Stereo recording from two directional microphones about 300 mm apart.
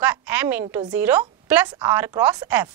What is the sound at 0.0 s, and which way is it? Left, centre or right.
A woman's voice, centre.